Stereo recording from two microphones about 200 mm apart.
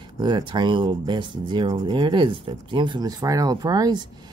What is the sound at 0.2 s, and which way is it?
Speech, 20° right (ahead or behind).